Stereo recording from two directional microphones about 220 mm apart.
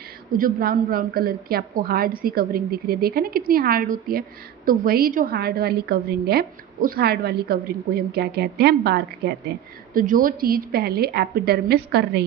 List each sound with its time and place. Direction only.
0.3 s a woman's voice: 40° right (ahead or behind)
9.9 s a woman's voice: 40° right (ahead or behind)